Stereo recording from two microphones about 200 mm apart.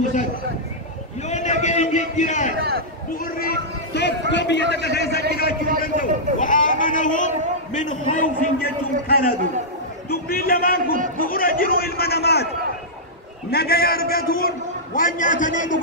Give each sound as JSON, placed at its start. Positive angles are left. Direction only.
{"t": 0.0, "sound": "speech", "side_deg": 40}
{"t": 1.3, "sound": "a sound", "side_deg": 35}
{"t": 3.3, "sound": "a man's voice", "side_deg": 50}
{"t": 5.2, "sound": "a man's voice", "side_deg": -50}
{"t": 5.8, "sound": "a man's voice", "side_deg": 40}
{"t": 13.5, "sound": "a man's voice", "side_deg": 50}